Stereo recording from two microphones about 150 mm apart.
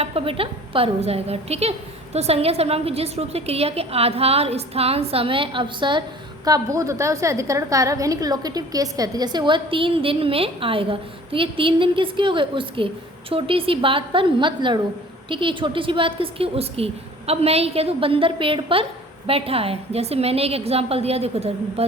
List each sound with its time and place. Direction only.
0.0 s a woman's voice: 40° right (ahead or behind)